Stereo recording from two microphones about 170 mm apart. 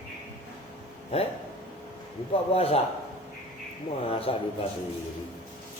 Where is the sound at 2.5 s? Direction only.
35° left (ahead or behind).